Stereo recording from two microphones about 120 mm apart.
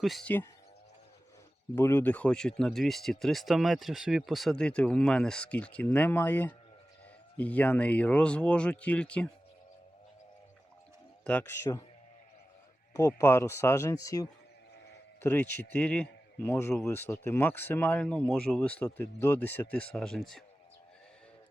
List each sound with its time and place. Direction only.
0.0 s speech: centre (ahead or behind)
1.7 s speech: 20° left (ahead or behind)
11.2 s speech: 10° left (ahead or behind)
13.0 s speech: 30° left (ahead or behind)
15.2 s speech: 15° left (ahead or behind)